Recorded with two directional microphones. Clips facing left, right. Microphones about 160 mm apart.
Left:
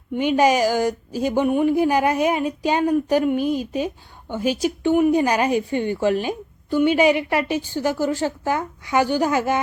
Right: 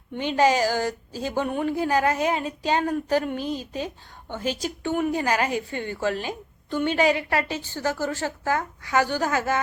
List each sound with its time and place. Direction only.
0.1 s a woman's voice: 15° left (ahead or behind)